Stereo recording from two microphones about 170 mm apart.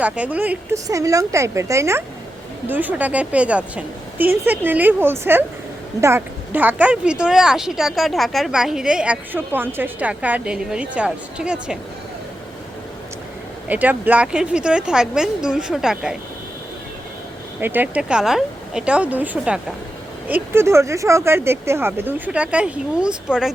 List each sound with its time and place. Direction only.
0.0 s speech: 10° right (ahead or behind)
13.7 s speech: 10° right (ahead or behind)
17.6 s speech: 10° right (ahead or behind)